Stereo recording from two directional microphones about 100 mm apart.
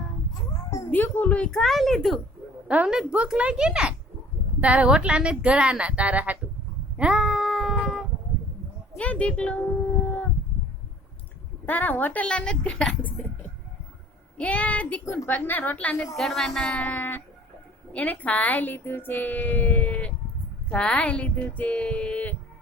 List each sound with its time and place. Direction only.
0.9 s speech: 20° left (ahead or behind); by 2.2 s 5° left (ahead or behind)
2.6 s speech: 10° right (ahead or behind)
6.9 s a sound: 5° right (ahead or behind)
9.0 s speech: 15° left (ahead or behind)
11.6 s speech: 15° left (ahead or behind)
14.3 s speech: 15° left (ahead or behind)
16.1 s speech: centre (ahead or behind)